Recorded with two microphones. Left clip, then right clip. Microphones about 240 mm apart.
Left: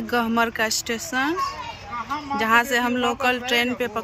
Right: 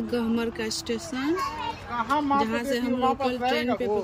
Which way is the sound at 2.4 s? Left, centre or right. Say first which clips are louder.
Left 7 dB; centre.